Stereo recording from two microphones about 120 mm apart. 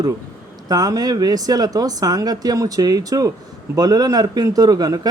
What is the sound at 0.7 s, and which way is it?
Speech, 30° right (ahead or behind).